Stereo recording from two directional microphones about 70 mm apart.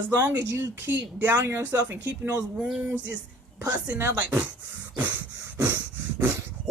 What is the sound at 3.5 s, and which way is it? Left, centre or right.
Speech, right.